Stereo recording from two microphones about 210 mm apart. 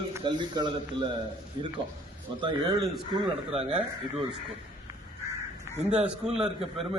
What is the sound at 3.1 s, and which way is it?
Speech, 25° right (ahead or behind).